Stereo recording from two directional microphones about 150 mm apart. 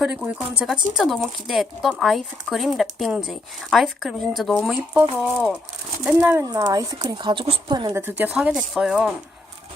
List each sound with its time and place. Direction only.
0.0 s speech: 5° right (ahead or behind); by 7.9 s 30° right (ahead or behind)
7.9 s speech: 15° right (ahead or behind)